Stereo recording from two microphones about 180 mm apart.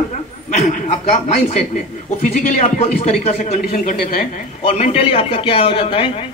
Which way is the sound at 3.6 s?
45° left (ahead or behind).